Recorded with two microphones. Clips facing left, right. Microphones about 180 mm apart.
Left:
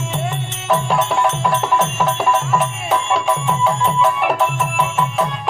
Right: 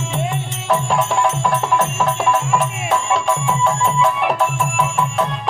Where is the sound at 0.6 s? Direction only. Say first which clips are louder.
Left 1 dB; centre (ahead or behind).